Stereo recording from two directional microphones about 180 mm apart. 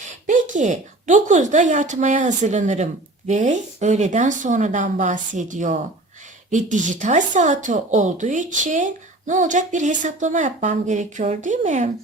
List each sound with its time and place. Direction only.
0.0 s a woman's voice: 45° right (ahead or behind)